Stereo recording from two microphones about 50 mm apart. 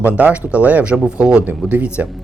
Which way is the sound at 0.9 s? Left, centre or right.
Centre.